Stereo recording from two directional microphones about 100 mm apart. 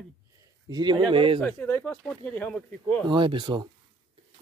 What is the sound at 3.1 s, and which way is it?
Speech, 55° right (ahead or behind).